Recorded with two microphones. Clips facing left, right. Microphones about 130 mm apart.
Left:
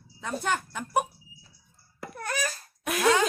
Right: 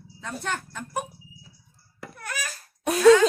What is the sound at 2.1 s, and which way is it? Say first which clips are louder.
Laughter: left 4 dB; 35° left (ahead or behind).